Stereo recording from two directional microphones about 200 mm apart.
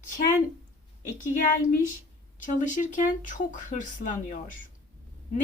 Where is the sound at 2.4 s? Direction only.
40° left (ahead or behind).